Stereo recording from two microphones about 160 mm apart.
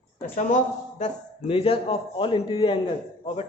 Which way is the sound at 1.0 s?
35° left (ahead or behind).